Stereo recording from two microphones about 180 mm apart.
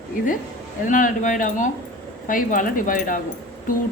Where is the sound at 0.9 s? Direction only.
45° left (ahead or behind).